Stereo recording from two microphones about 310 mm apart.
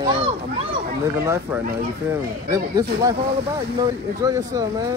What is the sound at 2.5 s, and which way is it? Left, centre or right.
Speech, centre.